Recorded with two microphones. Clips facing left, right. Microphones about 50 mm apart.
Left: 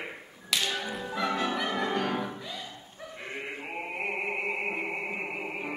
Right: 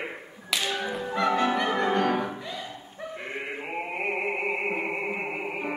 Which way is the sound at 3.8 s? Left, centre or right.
Centre.